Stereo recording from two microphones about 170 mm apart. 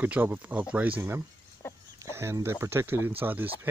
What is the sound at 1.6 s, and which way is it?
Chicken, 15° left (ahead or behind).